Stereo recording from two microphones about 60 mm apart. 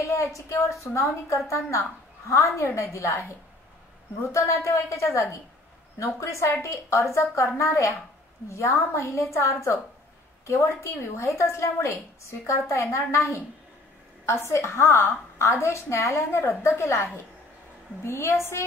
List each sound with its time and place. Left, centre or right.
0.0 s a woman's voice: left
4.2 s a woman's voice: left